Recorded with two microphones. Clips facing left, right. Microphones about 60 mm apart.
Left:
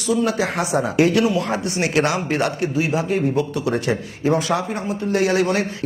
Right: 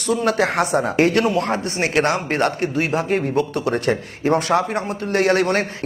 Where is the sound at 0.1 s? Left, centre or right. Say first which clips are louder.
Right 1 dB; right.